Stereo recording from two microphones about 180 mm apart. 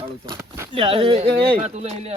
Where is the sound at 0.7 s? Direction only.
30° right (ahead or behind).